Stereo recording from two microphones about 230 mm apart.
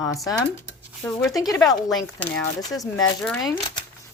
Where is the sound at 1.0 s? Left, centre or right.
Centre.